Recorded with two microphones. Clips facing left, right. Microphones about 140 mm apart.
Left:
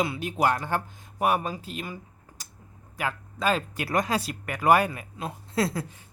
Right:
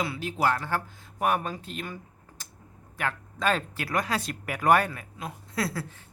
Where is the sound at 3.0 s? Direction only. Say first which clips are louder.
Left 1 dB; 5° left (ahead or behind).